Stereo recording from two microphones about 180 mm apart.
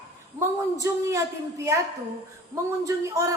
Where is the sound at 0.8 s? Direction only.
15° right (ahead or behind).